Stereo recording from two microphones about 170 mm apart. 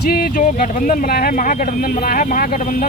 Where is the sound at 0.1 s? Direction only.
60° left (ahead or behind).